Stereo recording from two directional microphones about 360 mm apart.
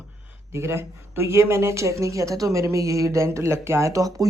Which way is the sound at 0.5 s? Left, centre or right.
Centre.